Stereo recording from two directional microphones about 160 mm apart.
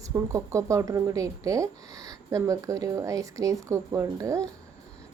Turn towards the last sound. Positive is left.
turn(degrees=-20)  # may be behind; listen again after turning